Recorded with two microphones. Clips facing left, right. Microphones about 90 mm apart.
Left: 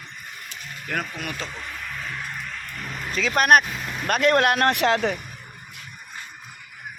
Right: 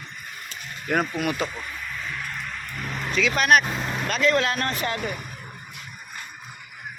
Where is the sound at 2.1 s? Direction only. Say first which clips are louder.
Even; 15° left (ahead or behind).